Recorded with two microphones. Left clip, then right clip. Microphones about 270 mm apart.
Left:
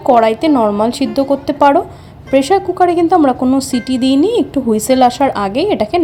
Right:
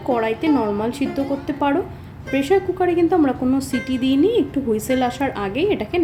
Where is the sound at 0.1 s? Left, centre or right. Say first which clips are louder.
Left 9 dB; left.